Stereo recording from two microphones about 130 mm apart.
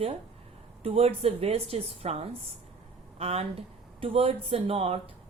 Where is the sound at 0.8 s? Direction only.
50° right (ahead or behind).